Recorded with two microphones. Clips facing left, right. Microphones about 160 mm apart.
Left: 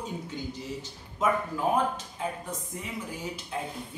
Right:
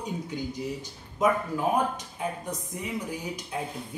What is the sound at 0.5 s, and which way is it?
Speech, 15° right (ahead or behind).